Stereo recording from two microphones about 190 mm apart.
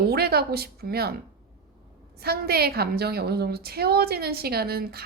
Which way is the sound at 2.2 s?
55° right (ahead or behind).